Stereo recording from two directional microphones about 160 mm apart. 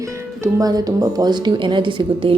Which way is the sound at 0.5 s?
20° right (ahead or behind).